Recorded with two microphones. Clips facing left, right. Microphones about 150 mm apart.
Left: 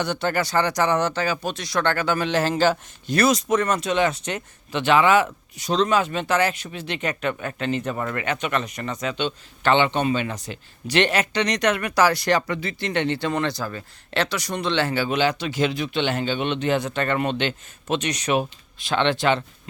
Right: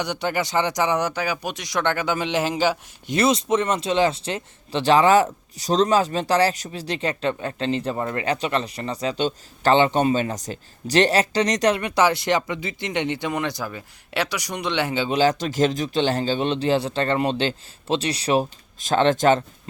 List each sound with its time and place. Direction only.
0.0 s speech: 15° right (ahead or behind)
3.2 s speech: 25° right (ahead or behind)
15.1 s speech: 40° right (ahead or behind)